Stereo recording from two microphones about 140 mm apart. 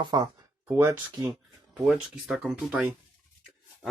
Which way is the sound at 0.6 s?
20° right (ahead or behind).